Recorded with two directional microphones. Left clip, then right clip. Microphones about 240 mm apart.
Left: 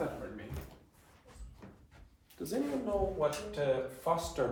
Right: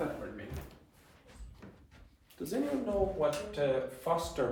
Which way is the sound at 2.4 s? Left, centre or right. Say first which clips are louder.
Right 1 dB; centre.